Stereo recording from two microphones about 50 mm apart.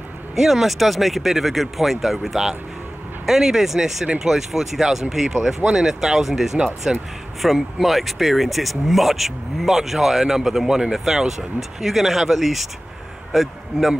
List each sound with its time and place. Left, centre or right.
0.4 s speech: centre
6.9 s speech: centre
7.4 s a man's voice: centre